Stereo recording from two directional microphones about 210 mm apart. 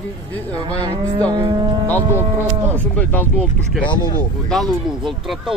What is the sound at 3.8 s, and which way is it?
Speech, 20° left (ahead or behind).